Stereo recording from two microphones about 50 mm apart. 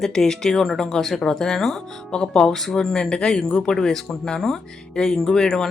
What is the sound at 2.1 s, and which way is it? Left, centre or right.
Speech, centre.